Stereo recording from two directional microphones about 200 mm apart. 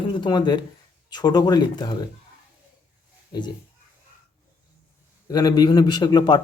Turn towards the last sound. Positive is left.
turn(degrees=20)  # may be behind; listen again after turning